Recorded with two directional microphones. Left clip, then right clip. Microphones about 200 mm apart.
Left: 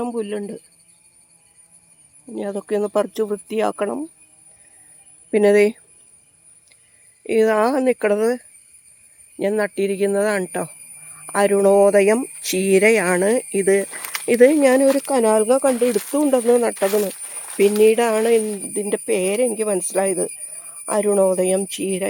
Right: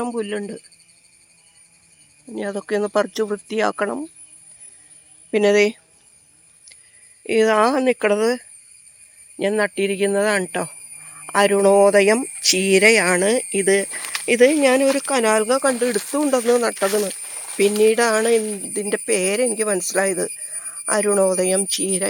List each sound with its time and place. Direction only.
0.0 s speech: 5° right (ahead or behind)
2.3 s speech: centre (ahead or behind)
5.3 s speech: 15° left (ahead or behind)
7.3 s speech: centre (ahead or behind)
13.8 s speech: 5° right (ahead or behind)
14.3 s speech: 20° left (ahead or behind)
14.8 s speech: centre (ahead or behind)
15.1 s speech: 15° left (ahead or behind)
16.7 s speech: 5° left (ahead or behind)